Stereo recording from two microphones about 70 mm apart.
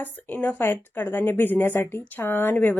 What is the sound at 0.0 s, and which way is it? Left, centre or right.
A woman's voice, left.